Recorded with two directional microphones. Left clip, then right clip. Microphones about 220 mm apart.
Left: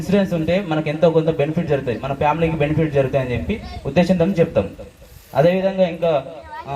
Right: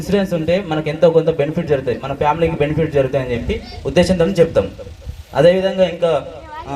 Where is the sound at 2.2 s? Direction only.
35° right (ahead or behind).